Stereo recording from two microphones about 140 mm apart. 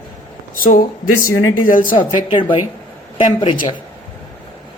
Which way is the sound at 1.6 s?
80° left.